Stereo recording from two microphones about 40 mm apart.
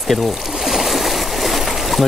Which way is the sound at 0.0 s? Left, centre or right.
Centre.